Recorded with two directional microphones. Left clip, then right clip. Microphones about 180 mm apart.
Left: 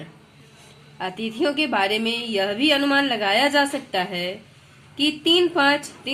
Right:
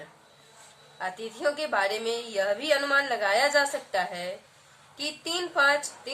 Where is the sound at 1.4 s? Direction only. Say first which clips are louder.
Left 5 dB; 45° left (ahead or behind).